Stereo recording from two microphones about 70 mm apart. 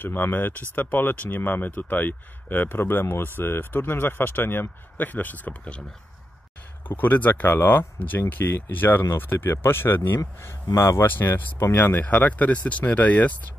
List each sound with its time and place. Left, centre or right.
0.0 s speech: left
6.9 s speech: left
10.7 s speech: left
11.1 s speech: left